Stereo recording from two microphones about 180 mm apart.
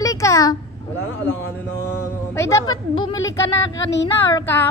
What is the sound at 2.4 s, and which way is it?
Speech, 15° left (ahead or behind).